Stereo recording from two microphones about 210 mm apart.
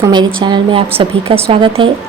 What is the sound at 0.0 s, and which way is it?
A woman's voice, 20° right (ahead or behind).